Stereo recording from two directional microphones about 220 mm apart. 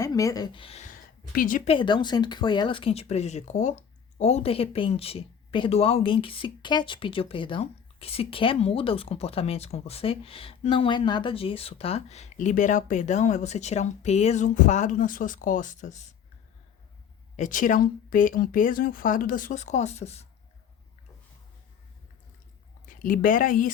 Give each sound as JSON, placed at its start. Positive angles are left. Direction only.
{"t": 0.0, "sound": "speech", "side_deg": 15}
{"t": 1.7, "sound": "speech", "side_deg": 20}
{"t": 17.3, "sound": "speech", "side_deg": 35}
{"t": 22.9, "sound": "speech", "side_deg": 40}